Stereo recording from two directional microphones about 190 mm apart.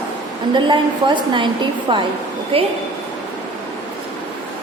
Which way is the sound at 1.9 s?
25° right (ahead or behind).